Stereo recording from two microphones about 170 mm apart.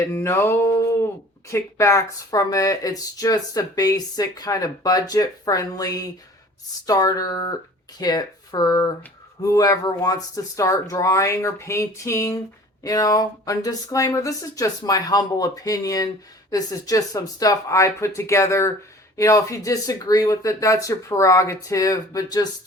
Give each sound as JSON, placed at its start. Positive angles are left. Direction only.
{"t": 0.1, "sound": "music", "side_deg": 15}
{"t": 1.5, "sound": "speech", "side_deg": 15}